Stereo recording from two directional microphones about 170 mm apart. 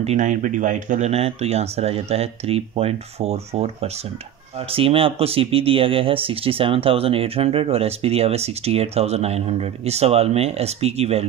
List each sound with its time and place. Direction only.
0.0 s speech: 45° right (ahead or behind)